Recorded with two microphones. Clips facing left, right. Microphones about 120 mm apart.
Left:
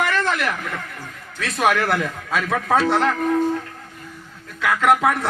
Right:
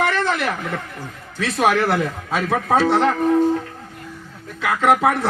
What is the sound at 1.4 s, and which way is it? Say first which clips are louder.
A man's voice: right 2 dB; 30° right (ahead or behind).